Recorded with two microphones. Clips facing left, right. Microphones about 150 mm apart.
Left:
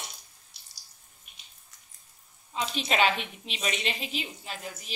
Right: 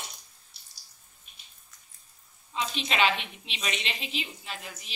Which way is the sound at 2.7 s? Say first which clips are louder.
Left 1 dB; 45° left (ahead or behind).